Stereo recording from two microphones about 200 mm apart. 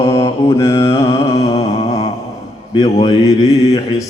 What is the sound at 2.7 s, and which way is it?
Mantra, 20° left (ahead or behind).